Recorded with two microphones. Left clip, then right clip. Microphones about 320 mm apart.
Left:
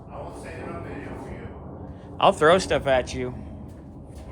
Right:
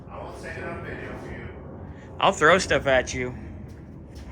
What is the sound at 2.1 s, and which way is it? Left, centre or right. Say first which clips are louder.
Speech: left 1 dB; centre.